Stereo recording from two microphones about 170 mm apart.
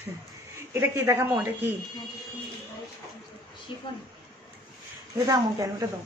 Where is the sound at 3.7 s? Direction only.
30° left (ahead or behind).